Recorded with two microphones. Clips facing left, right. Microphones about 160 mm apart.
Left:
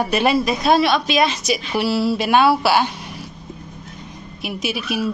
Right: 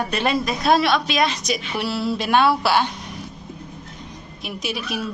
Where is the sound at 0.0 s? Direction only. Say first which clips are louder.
Left 4 dB; 10° left (ahead or behind).